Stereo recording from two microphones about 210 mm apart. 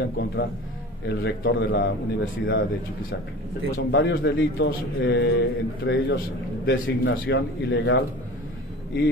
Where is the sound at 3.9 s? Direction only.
60° left (ahead or behind).